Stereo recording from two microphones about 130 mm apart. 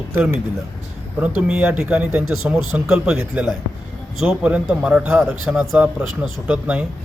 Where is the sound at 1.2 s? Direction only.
10° right (ahead or behind).